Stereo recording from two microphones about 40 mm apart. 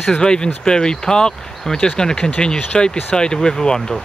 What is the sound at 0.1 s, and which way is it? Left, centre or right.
Speech, centre.